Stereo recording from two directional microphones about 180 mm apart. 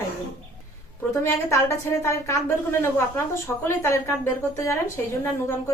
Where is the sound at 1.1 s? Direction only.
15° left (ahead or behind).